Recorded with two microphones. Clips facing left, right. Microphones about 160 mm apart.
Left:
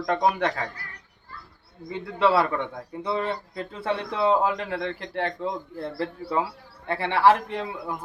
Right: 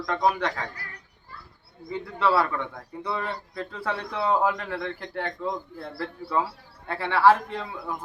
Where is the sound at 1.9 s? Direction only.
20° left (ahead or behind).